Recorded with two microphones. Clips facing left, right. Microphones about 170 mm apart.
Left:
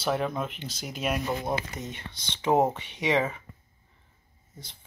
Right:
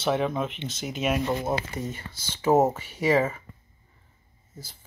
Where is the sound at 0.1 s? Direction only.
5° right (ahead or behind).